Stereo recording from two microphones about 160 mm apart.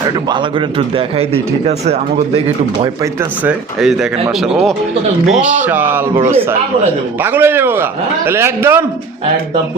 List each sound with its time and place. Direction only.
0.0 s a man's voice: 30° right (ahead or behind)
3.4 s a man's voice: 5° right (ahead or behind)